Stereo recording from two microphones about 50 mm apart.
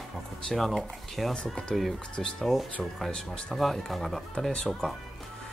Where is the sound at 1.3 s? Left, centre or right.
Centre.